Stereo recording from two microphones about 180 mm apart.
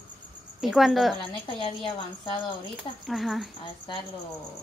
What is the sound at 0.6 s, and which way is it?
Speech, centre (ahead or behind).